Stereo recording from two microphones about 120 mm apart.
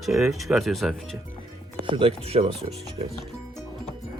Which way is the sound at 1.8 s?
45° right (ahead or behind).